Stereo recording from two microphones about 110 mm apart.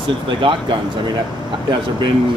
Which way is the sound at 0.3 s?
50° right (ahead or behind).